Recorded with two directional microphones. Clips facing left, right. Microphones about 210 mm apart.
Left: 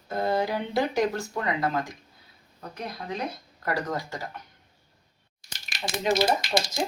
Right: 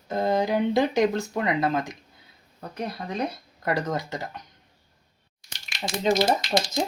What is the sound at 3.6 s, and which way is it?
Speech, 20° right (ahead or behind).